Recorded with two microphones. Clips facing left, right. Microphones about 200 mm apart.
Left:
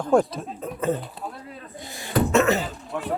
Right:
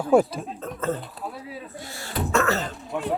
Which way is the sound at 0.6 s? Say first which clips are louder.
Left 3 dB; 15° left (ahead or behind).